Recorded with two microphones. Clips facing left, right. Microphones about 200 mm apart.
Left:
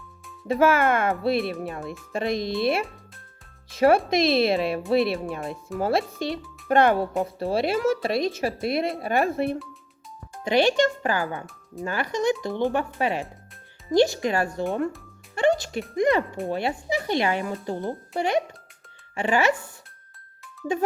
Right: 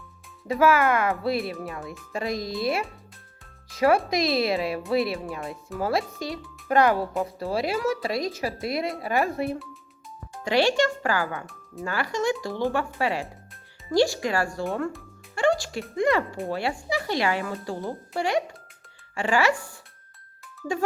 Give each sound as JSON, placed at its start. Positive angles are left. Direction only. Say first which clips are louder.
{"t": 0.4, "sound": "speech", "louder": "left 1 dB", "side_deg": 25}